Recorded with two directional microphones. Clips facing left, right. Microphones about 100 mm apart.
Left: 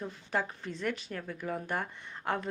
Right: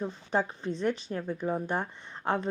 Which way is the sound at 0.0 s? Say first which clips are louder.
Right 4 dB; 25° right (ahead or behind).